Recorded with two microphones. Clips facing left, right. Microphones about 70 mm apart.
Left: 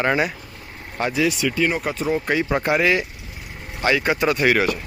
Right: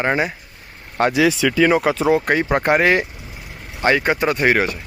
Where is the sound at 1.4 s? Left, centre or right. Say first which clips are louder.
Right 6 dB; right.